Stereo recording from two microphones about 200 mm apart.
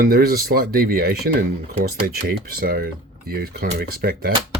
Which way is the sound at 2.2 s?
50° right (ahead or behind).